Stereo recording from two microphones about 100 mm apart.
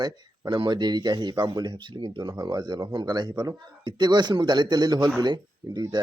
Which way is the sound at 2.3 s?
40° right (ahead or behind).